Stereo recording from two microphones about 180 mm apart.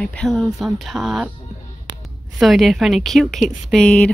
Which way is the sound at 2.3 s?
Centre (ahead or behind).